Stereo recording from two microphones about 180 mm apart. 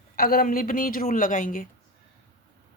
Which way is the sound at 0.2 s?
55° left (ahead or behind).